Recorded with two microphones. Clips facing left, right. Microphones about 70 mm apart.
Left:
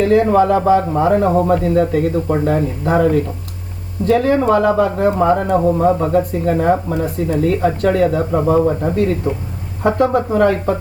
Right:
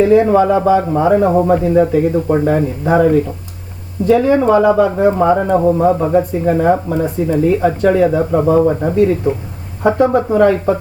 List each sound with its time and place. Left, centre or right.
0.0 s a man's voice: centre